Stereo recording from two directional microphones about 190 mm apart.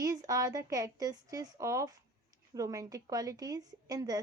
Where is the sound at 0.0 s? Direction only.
20° right (ahead or behind).